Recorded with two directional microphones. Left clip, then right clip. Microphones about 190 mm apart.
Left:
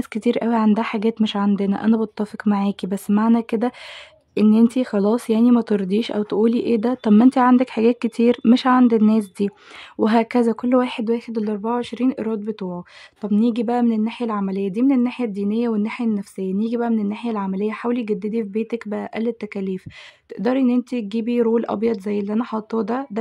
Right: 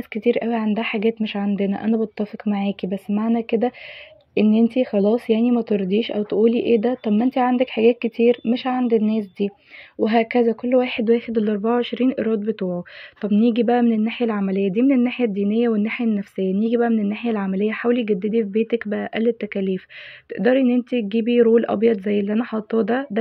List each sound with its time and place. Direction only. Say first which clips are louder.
0.1 s speech: right 1 dB; 20° left (ahead or behind)